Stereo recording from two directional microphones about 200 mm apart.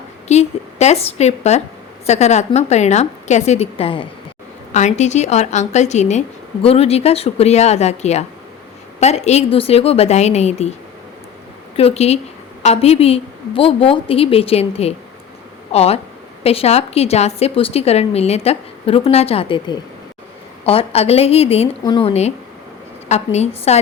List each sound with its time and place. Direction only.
0.3 s a woman's voice: 35° left (ahead or behind)
11.8 s a woman's voice: 30° left (ahead or behind)